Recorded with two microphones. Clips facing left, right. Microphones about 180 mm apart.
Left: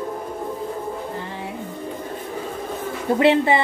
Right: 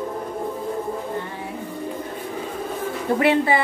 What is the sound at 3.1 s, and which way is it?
Speech, 25° left (ahead or behind).